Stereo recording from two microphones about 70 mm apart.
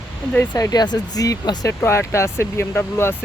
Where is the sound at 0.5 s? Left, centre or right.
Left.